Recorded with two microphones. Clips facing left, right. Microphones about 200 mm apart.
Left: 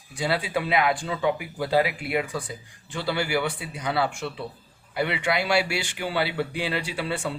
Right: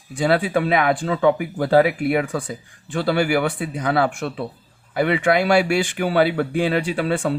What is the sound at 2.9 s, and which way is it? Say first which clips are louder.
Speech: right 7 dB; 55° right (ahead or behind).